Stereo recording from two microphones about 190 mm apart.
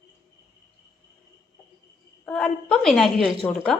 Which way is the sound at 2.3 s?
5° left (ahead or behind).